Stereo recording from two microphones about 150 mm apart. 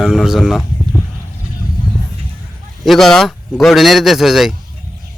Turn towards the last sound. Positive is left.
turn(degrees=0)  # may be behind; listen again after turning